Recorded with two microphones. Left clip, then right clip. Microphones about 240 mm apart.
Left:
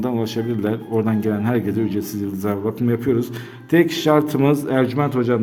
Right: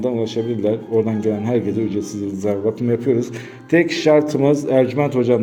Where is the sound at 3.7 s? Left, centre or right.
Centre.